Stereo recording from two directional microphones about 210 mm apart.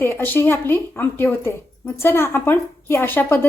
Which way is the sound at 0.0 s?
10° left (ahead or behind).